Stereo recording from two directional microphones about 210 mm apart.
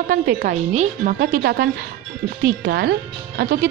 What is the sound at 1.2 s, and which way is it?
Speech, 45° right (ahead or behind).